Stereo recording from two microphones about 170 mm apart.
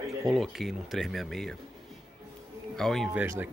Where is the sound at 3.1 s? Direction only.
10° right (ahead or behind).